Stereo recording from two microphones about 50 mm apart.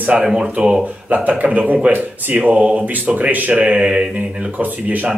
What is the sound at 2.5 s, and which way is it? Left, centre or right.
Speech, right.